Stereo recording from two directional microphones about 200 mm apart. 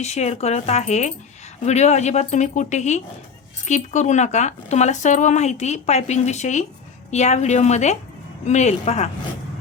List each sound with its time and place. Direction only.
0.0 s speech: 35° left (ahead or behind)